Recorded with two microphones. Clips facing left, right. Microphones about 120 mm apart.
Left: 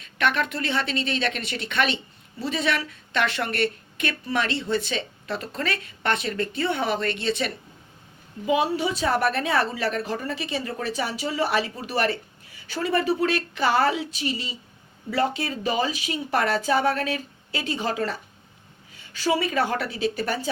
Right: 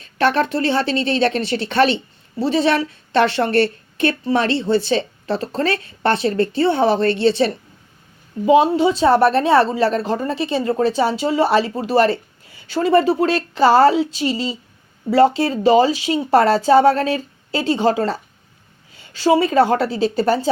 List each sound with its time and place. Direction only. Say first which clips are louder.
0.0 s a woman's voice: right 7 dB; 35° right (ahead or behind)